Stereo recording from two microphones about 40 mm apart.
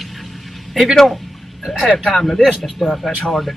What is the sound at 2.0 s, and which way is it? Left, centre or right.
Speech, centre.